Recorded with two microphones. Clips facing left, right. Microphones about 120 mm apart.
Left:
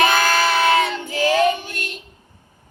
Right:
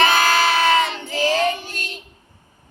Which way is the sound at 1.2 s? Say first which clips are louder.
Left 3 dB; 55° left (ahead or behind).